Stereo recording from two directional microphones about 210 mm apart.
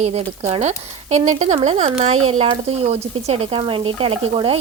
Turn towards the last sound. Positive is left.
turn(degrees=-25)  # may be behind; listen again after turning